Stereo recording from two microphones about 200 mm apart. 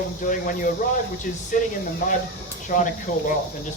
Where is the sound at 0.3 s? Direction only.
40° left (ahead or behind).